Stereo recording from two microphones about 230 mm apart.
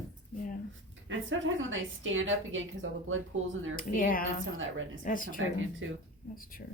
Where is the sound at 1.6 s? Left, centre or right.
Right.